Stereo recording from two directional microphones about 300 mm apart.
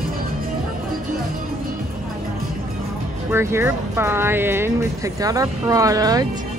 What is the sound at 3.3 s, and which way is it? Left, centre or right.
Speech, centre.